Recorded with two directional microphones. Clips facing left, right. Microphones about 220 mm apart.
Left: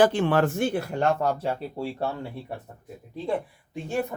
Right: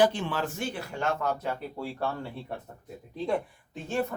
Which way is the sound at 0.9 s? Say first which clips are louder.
Left 5 dB; 30° left (ahead or behind).